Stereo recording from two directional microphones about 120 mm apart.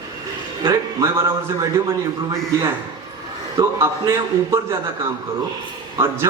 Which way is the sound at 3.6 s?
25° right (ahead or behind).